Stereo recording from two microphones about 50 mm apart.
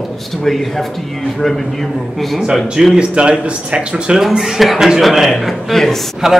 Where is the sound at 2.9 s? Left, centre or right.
Centre.